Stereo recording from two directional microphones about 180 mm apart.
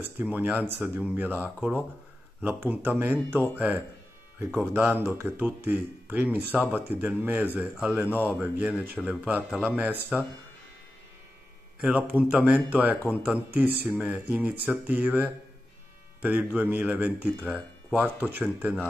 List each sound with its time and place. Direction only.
0.2 s speech: 10° right (ahead or behind)
11.8 s speech: 5° right (ahead or behind)